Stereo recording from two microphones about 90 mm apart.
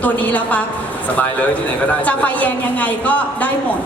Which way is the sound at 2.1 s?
15° left (ahead or behind).